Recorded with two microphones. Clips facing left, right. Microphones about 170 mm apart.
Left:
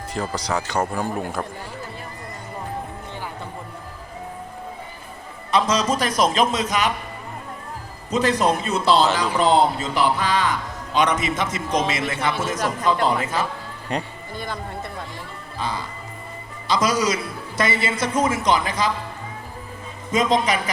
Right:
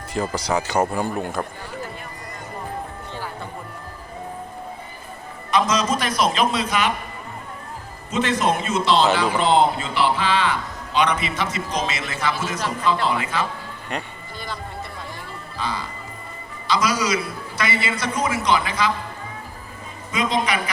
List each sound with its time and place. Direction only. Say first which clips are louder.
0.1 s speech: right 2 dB; 5° right (ahead or behind)
5.5 s a man's voice: even; 30° left (ahead or behind)
8.1 s a man's voice: left 1 dB; 35° left (ahead or behind)
14.3 s speech: left 3 dB; 50° left (ahead or behind)
16.6 s a man's voice: left 1 dB; 45° left (ahead or behind)
20.1 s a man's voice: left 3 dB; 40° left (ahead or behind)